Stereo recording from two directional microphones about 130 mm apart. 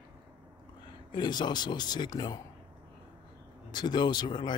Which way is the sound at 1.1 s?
35° left (ahead or behind).